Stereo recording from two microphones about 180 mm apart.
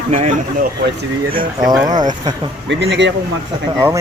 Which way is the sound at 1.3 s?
20° right (ahead or behind).